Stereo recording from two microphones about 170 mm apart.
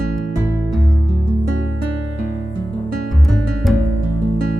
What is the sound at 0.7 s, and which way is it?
Music, centre (ahead or behind).